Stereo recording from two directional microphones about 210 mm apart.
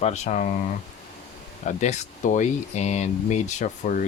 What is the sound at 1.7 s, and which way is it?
Speech, 35° left (ahead or behind).